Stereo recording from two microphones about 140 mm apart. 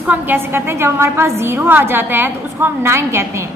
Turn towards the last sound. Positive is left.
turn(degrees=-20)  # may be behind; listen again after turning